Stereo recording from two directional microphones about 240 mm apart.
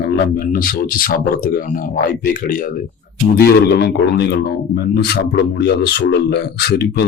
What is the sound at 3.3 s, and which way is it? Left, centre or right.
Speech, left.